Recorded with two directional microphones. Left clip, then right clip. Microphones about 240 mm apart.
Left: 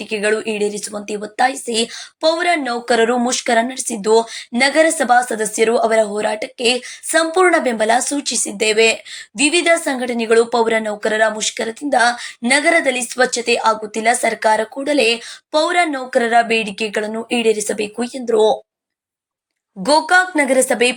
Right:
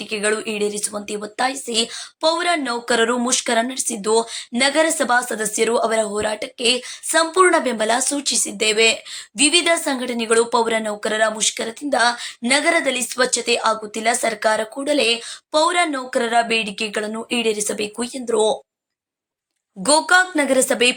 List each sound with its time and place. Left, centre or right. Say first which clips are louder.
0.0 s a woman's voice: left 3 dB; centre
19.8 s a woman's voice: left 2 dB; centre